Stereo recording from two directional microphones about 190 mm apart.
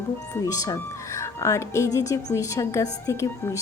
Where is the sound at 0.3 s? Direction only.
20° left (ahead or behind).